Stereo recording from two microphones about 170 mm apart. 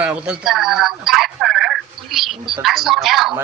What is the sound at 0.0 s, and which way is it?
A woman's voice, 5° right (ahead or behind).